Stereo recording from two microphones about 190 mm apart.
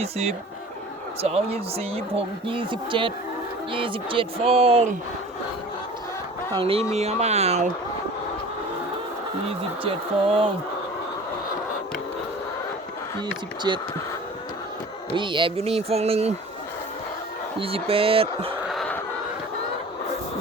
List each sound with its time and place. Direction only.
0.0 s speech: 35° right (ahead or behind)
6.5 s speech: 30° right (ahead or behind)
9.8 s speech: 30° right (ahead or behind)
13.7 s speech: 20° right (ahead or behind)
15.1 s speech: 25° right (ahead or behind)
17.6 s speech: 30° right (ahead or behind)
18.7 s a sound: centre (ahead or behind)